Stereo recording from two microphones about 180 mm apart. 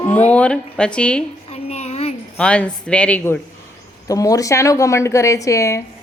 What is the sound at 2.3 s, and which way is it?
Speech, 5° left (ahead or behind).